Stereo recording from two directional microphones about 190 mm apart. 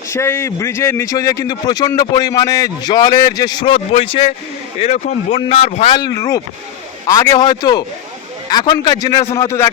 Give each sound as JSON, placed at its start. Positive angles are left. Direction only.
{"t": 0.1, "sound": "a man's voice", "side_deg": 15}